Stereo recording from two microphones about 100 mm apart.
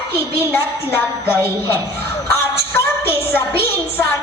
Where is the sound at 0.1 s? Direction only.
25° left (ahead or behind).